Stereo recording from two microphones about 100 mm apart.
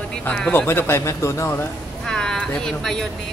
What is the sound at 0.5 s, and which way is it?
Speech, 20° left (ahead or behind).